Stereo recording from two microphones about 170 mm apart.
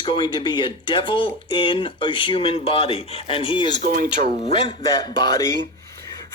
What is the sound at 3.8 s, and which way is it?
Speech, 55° right (ahead or behind).